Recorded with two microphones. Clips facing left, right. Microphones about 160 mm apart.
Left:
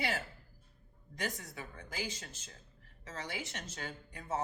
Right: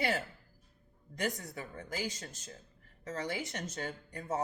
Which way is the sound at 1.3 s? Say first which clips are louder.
Right 4 dB; 50° right (ahead or behind).